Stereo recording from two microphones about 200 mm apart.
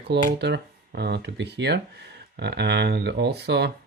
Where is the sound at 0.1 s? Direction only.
50° right (ahead or behind).